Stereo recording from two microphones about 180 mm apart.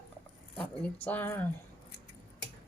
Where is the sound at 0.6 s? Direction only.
10° left (ahead or behind).